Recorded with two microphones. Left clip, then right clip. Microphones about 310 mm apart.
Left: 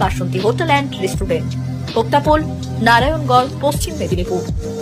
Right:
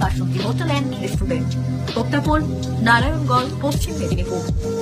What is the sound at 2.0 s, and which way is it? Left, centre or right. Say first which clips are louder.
Speech: left 7 dB; centre.